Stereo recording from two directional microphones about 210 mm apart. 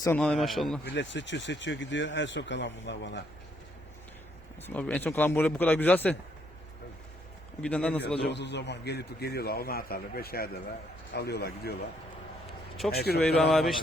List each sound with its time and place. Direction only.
0.0 s a man's voice: 10° left (ahead or behind)
0.9 s speech: 60° left (ahead or behind)
4.6 s a man's voice: 5° left (ahead or behind)
7.6 s a man's voice: 5° left (ahead or behind)
8.3 s a man's voice: 55° left (ahead or behind)
13.0 s a man's voice: 50° left (ahead or behind)
13.2 s a man's voice: 5° left (ahead or behind)